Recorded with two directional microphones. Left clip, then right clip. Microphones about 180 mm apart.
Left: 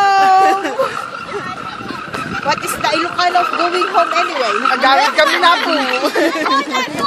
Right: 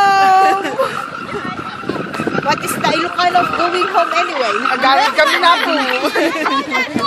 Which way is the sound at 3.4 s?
50° left (ahead or behind).